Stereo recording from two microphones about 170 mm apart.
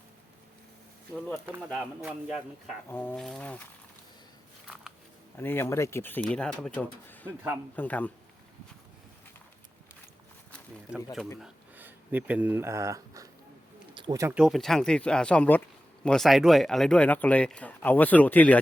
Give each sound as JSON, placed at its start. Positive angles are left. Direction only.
{"t": 1.7, "sound": "speech", "side_deg": 0}
{"t": 2.9, "sound": "speech", "side_deg": 10}
{"t": 5.4, "sound": "speech", "side_deg": 10}
{"t": 10.9, "sound": "speech", "side_deg": 0}
{"t": 13.9, "sound": "a sound", "side_deg": -25}
{"t": 14.3, "sound": "speech", "side_deg": 0}